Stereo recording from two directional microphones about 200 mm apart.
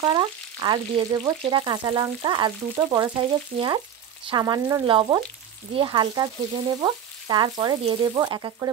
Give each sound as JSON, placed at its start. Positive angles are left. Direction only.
{"t": 0.0, "sound": "frying", "side_deg": -25}